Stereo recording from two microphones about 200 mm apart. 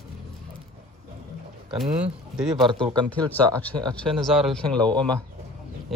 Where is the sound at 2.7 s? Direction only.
20° right (ahead or behind).